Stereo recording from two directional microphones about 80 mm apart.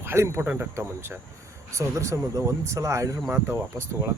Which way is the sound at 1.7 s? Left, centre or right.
Right.